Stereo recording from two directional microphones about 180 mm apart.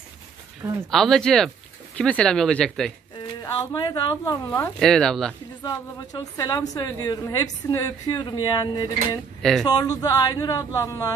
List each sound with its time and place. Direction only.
0.8 s speech: centre (ahead or behind)
3.5 s a woman's voice: 25° left (ahead or behind)
4.7 s speech: 5° left (ahead or behind)
5.6 s a woman's voice: 20° left (ahead or behind)
9.4 s speech: centre (ahead or behind)
9.7 s a woman's voice: 20° left (ahead or behind)